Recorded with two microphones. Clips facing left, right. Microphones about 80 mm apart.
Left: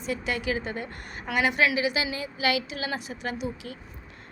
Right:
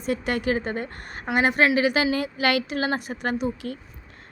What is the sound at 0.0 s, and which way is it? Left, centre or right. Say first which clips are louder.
A woman's voice: right 4 dB; right.